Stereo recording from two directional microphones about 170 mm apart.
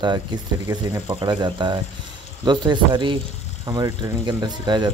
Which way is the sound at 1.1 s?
30° right (ahead or behind).